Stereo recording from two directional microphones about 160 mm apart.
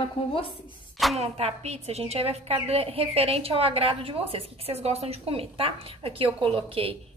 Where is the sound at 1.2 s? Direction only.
40° right (ahead or behind).